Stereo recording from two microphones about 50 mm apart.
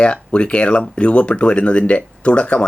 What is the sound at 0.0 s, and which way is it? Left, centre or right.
Speech, left.